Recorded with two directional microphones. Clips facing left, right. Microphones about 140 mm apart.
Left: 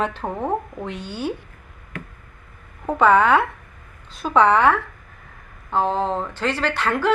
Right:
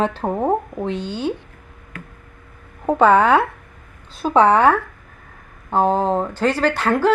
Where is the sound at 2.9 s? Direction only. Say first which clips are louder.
Right 2 dB; 35° right (ahead or behind).